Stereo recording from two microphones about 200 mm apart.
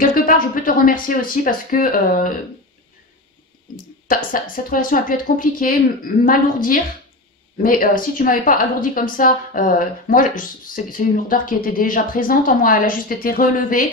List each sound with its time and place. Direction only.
0.8 s a woman's voice: 45° left (ahead or behind)
3.7 s a woman's voice: 45° left (ahead or behind)